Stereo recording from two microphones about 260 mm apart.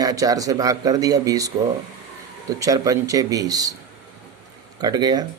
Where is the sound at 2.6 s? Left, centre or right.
Centre.